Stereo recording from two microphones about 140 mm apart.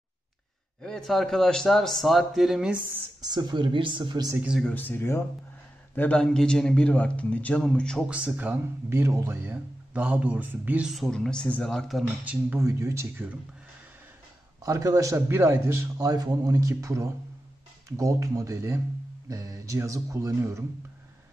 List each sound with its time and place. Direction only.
0.8 s speech: 5° left (ahead or behind)
3.2 s speech: 30° right (ahead or behind)
4.6 s a man's voice: 10° left (ahead or behind)
8.1 s speech: 10° right (ahead or behind)
10.9 s speech: centre (ahead or behind)
12.3 s a man's voice: 10° right (ahead or behind)
14.6 s a man's voice: 25° right (ahead or behind)